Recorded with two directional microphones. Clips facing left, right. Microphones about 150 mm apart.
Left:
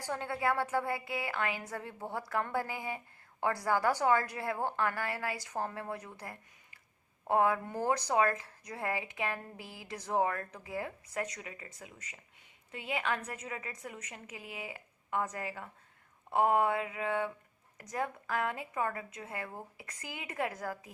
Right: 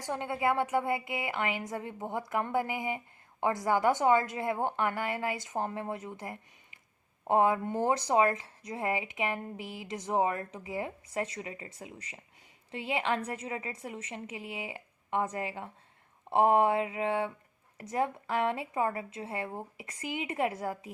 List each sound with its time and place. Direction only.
0.0 s speech: 20° right (ahead or behind)